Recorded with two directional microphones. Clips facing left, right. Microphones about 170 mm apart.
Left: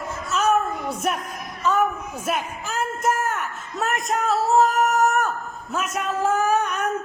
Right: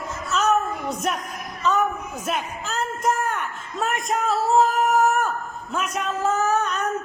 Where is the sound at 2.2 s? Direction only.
10° left (ahead or behind).